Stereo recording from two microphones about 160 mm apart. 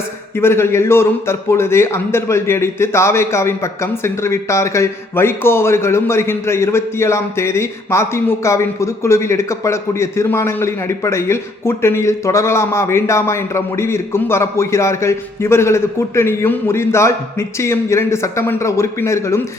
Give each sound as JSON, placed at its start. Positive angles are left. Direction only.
{"t": 0.3, "sound": "a man's voice", "side_deg": 15}